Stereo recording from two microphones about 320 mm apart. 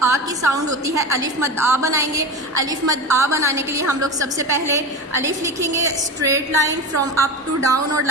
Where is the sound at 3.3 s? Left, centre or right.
Centre.